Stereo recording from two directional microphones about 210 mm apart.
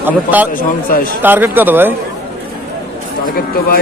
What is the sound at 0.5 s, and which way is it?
Speech, 40° left (ahead or behind).